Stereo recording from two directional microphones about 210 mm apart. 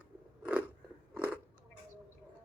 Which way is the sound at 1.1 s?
5° right (ahead or behind).